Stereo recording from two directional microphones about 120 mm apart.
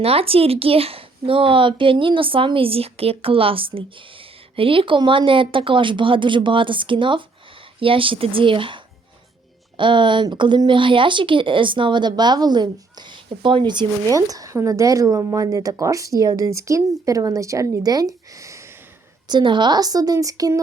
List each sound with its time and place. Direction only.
0.0 s speech: 55° right (ahead or behind); by 18.7 s 25° right (ahead or behind)
19.3 s speech: 40° right (ahead or behind)